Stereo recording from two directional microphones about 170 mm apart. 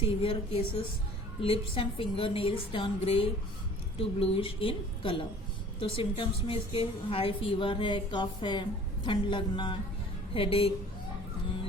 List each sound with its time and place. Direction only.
0.0 s a woman's voice: 30° left (ahead or behind)